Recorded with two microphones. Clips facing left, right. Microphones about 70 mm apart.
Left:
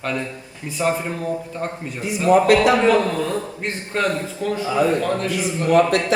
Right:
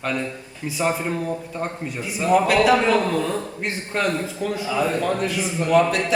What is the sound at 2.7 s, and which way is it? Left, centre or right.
A man's voice, centre.